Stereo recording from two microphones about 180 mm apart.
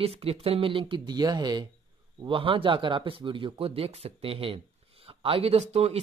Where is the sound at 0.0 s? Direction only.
35° right (ahead or behind).